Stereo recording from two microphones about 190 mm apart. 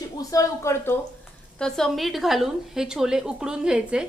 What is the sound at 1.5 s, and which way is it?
A woman's voice, 5° left (ahead or behind).